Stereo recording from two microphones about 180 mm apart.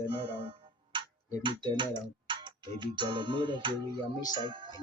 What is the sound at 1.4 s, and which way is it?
Music, 25° right (ahead or behind).